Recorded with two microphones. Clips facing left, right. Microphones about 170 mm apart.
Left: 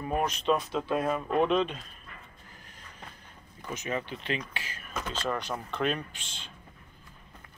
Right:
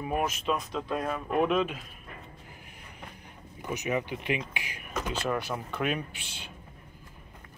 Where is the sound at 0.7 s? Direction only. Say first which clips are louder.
Left 3 dB; 25° left (ahead or behind).